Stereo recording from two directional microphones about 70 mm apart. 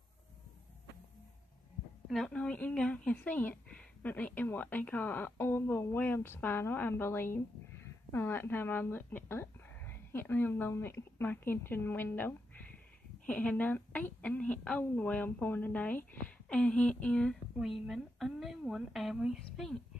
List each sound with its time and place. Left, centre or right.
2.2 s a woman's voice: centre
16.4 s speech: centre
17.6 s a woman's voice: centre